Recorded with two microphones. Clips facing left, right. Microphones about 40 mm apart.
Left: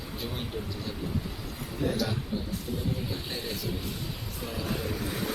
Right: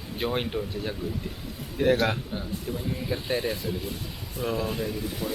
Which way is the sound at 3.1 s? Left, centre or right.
Right.